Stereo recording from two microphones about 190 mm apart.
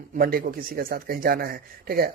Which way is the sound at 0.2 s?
50° right (ahead or behind).